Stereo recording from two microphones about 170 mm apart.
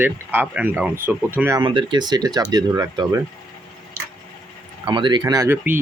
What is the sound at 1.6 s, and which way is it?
Speech, 30° right (ahead or behind).